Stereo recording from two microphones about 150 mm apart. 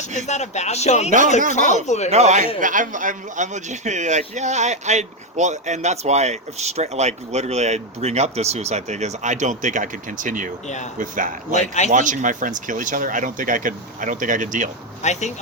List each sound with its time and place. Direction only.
0.3 s a man's voice: 50° left (ahead or behind)
2.0 s speech: 50° right (ahead or behind)
2.6 s speech: 60° right (ahead or behind)
11.5 s a man's voice: 50° left (ahead or behind)
11.9 s speech: 60° right (ahead or behind)
15.0 s a man's voice: 50° left (ahead or behind)